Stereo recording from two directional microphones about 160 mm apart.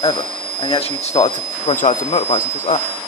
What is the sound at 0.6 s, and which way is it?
Speech, 30° left (ahead or behind).